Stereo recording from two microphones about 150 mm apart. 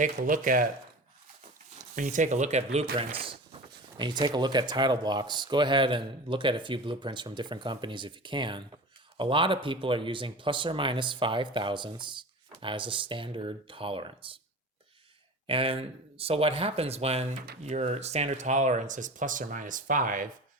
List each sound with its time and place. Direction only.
0.0 s speech: 60° right (ahead or behind)
2.0 s speech: 55° right (ahead or behind)
3.0 s speech: 40° right (ahead or behind)
15.4 s speech: 40° right (ahead or behind); by 20.2 s 60° right (ahead or behind)